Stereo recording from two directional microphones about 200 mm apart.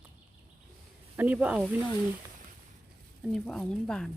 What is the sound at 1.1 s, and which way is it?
Speech, 10° right (ahead or behind).